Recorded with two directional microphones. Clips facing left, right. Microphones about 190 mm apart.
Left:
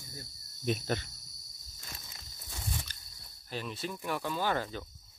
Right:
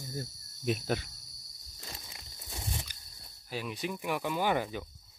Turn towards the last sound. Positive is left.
turn(degrees=-15)  # may be behind; listen again after turning